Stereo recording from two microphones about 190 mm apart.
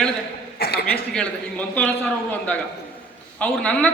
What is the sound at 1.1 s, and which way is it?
Speech, 5° left (ahead or behind).